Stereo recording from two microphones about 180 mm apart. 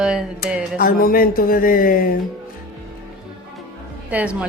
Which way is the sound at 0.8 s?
55° left (ahead or behind).